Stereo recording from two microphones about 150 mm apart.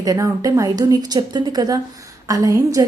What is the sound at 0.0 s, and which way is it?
A woman's voice, 25° right (ahead or behind).